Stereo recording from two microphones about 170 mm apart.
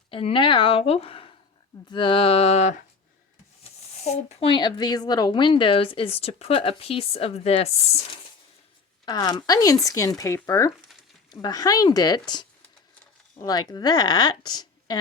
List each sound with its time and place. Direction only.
0.1 s speech: 35° left (ahead or behind)
9.0 s speech: 25° left (ahead or behind)